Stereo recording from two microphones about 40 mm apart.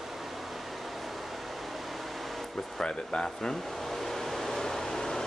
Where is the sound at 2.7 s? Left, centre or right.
Centre.